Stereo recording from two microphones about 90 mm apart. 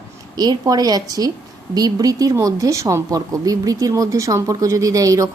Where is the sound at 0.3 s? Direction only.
45° right (ahead or behind).